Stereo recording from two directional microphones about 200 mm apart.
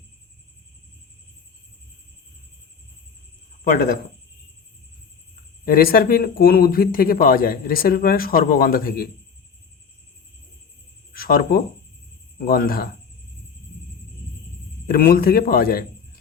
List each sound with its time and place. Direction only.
3.6 s speech: 45° left (ahead or behind)
5.6 s speech: 45° left (ahead or behind)
11.1 s cricket: 45° left (ahead or behind)
12.5 s speech: 45° left (ahead or behind)
14.8 s speech: 45° left (ahead or behind)